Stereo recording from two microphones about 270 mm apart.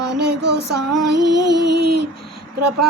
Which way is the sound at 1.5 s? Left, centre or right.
Right.